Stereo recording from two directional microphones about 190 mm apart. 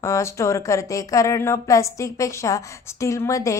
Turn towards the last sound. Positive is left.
turn(degrees=15)  # may be behind; listen again after turning